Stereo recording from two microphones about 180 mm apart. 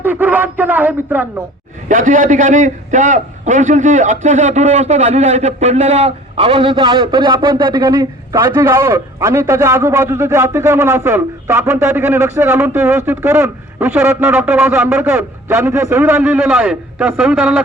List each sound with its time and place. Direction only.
0.0 s a man's voice: 10° right (ahead or behind)
1.9 s a man's voice: 50° right (ahead or behind); by 17.6 s 5° right (ahead or behind)